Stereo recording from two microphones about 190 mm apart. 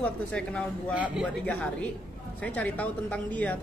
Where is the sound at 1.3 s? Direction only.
5° left (ahead or behind).